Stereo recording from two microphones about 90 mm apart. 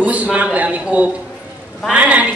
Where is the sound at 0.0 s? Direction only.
15° right (ahead or behind).